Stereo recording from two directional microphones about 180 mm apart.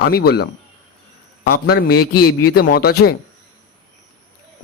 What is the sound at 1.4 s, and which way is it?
A man's voice, 65° left (ahead or behind).